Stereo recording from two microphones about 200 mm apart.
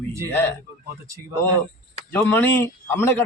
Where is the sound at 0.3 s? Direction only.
10° left (ahead or behind).